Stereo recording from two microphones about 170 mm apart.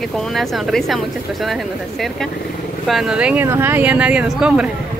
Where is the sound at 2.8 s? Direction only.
Centre (ahead or behind).